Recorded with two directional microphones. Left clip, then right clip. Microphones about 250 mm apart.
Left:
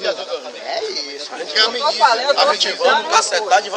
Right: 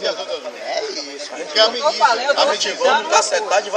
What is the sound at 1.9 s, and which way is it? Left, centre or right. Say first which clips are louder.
Speech: left 4 dB; centre.